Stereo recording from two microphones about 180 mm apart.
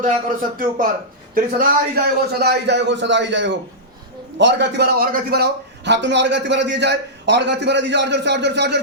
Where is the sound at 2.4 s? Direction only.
70° right (ahead or behind).